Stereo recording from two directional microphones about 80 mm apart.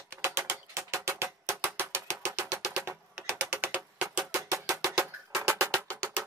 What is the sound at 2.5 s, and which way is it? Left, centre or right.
Music, centre.